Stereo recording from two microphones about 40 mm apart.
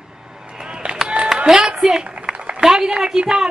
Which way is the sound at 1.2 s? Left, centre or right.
Right.